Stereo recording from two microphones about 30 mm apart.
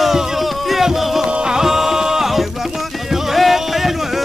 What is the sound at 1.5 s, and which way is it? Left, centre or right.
Music, centre.